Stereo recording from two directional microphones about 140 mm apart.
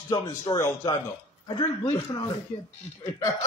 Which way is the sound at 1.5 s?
30° left (ahead or behind).